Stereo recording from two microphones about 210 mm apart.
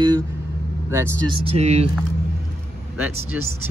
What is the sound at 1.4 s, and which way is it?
Speech, 30° right (ahead or behind).